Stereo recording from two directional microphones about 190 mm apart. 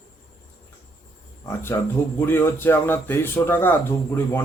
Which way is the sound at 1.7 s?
15° left (ahead or behind).